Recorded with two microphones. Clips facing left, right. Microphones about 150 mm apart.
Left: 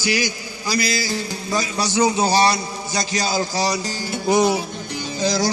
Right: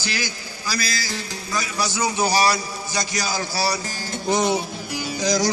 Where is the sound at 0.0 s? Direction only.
15° left (ahead or behind).